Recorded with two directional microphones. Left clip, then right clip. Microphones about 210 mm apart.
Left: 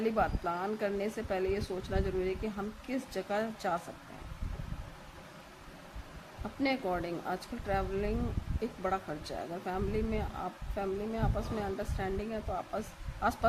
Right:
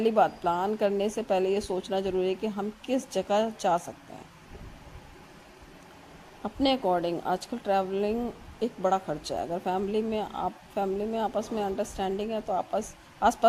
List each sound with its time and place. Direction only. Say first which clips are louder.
0.0 s speech: right 8 dB; 30° right (ahead or behind)
6.6 s speech: right 7 dB; 25° right (ahead or behind)